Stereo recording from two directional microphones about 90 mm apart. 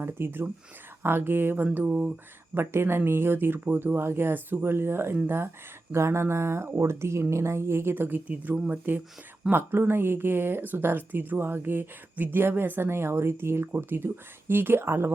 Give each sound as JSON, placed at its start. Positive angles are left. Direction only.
{"t": 0.0, "sound": "speech", "side_deg": -25}
{"t": 2.6, "sound": "speech", "side_deg": -25}